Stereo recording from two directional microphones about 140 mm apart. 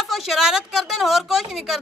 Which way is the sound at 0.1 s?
5° right (ahead or behind).